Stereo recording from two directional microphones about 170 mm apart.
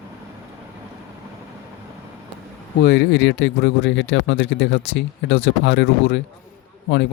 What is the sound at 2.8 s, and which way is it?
Speech, 80° left.